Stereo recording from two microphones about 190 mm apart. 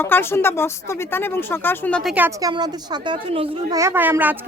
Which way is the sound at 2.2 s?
20° right (ahead or behind).